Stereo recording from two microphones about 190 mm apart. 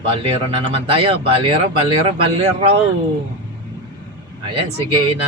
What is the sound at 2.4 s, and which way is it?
Speech, 30° right (ahead or behind).